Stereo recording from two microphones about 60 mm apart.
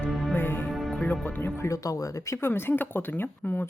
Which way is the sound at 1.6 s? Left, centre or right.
Left.